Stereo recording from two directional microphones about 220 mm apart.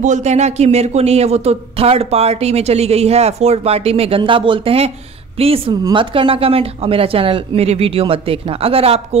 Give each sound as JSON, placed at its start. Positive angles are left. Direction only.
{"t": 0.0, "sound": "speech", "side_deg": -30}